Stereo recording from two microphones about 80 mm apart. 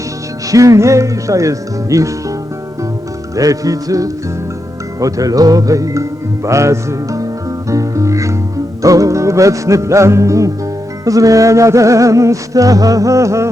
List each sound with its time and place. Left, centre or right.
0.5 s speech: right
3.3 s speech: right
4.9 s music: right